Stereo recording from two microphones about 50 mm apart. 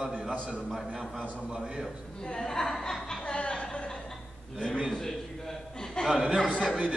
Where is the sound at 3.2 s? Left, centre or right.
Left.